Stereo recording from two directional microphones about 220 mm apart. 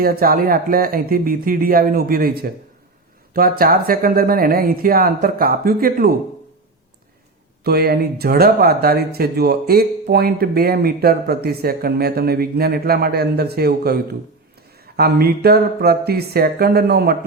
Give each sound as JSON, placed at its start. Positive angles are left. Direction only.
{"t": 0.0, "sound": "speech", "side_deg": -40}
{"t": 7.6, "sound": "speech", "side_deg": -45}